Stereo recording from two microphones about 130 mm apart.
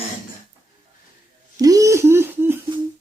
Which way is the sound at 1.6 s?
25° right (ahead or behind).